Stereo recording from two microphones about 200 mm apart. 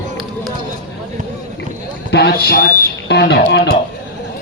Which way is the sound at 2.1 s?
55° left (ahead or behind).